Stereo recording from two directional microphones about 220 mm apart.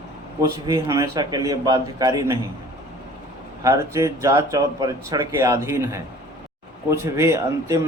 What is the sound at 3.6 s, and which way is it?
Speech, 15° right (ahead or behind).